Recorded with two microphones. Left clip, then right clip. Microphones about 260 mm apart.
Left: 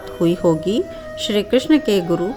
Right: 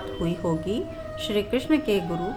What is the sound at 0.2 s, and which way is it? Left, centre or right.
A woman's voice, left.